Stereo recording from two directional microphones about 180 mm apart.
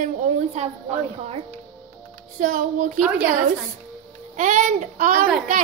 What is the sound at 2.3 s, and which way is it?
Speech, 45° right (ahead or behind).